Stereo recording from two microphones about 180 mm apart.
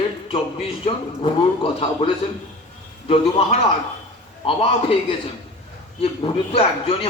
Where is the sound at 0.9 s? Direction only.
30° left (ahead or behind).